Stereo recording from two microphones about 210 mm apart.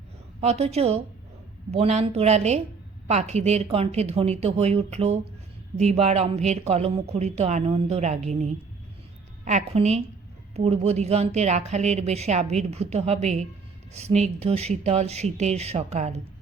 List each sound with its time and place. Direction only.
0.4 s a woman's voice: 30° right (ahead or behind)